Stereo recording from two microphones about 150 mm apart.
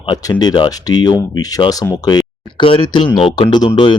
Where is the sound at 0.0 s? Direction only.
30° left (ahead or behind).